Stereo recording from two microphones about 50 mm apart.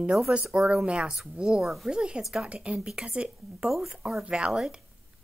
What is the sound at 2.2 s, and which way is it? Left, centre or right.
Speech, centre.